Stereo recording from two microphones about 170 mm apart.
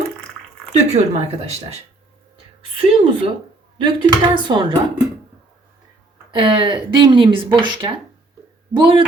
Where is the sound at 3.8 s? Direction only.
25° right (ahead or behind).